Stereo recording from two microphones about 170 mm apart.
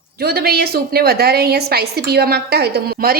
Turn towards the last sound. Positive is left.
turn(degrees=-65)  # may be behind; listen again after turning